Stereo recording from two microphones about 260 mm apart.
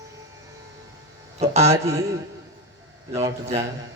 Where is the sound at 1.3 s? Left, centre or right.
Right.